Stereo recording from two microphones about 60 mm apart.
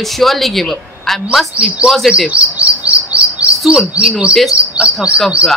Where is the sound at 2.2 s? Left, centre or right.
Centre.